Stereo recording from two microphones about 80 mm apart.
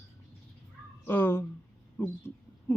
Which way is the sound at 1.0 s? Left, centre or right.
Left.